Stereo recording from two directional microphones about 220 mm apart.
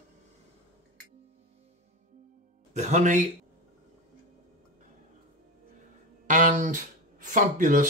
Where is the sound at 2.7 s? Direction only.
30° right (ahead or behind).